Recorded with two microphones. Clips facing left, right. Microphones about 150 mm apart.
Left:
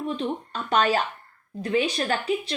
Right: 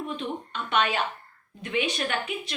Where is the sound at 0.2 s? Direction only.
35° left (ahead or behind).